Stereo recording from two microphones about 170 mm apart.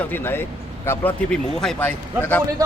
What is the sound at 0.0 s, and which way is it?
Speech, 10° left (ahead or behind).